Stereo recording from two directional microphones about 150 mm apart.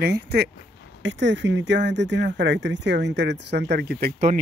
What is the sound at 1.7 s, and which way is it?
Speech, 65° right (ahead or behind).